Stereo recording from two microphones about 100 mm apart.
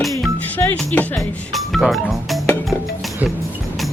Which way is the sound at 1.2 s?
Centre (ahead or behind).